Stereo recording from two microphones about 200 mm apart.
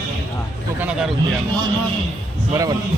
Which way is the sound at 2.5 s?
15° right (ahead or behind).